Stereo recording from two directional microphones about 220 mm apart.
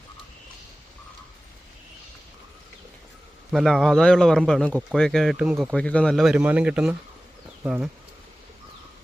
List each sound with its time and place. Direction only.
3.5 s a man's voice: centre (ahead or behind)